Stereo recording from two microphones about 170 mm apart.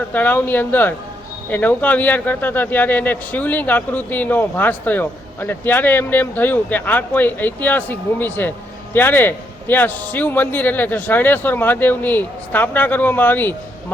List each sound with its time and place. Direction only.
0.1 s speech: 10° left (ahead or behind)